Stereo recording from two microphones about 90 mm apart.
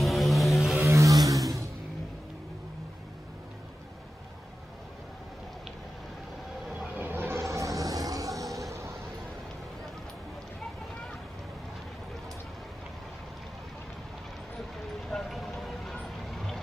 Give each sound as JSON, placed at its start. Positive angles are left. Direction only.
{"t": 0.0, "sound": "vehicle", "side_deg": 0}
{"t": 0.8, "sound": "vehicle", "side_deg": -35}
{"t": 7.0, "sound": "a sound", "side_deg": -25}
{"t": 15.0, "sound": "vehicle", "side_deg": 5}